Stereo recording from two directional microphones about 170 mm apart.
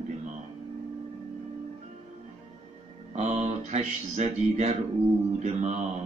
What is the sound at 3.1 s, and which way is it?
Speech, 45° right (ahead or behind).